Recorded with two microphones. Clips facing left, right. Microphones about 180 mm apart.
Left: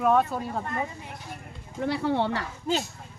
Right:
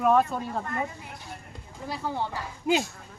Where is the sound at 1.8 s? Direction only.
70° left (ahead or behind).